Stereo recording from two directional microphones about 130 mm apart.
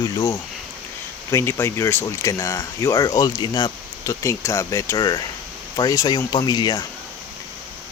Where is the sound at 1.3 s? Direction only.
20° left (ahead or behind).